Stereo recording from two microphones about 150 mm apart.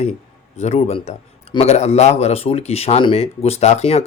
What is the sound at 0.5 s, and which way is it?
Speech, 45° left (ahead or behind).